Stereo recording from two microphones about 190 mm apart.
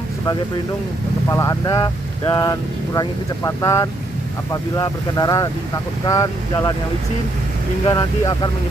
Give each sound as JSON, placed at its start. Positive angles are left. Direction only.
{"t": 1.3, "sound": "speech", "side_deg": 15}
{"t": 7.8, "sound": "speech", "side_deg": 20}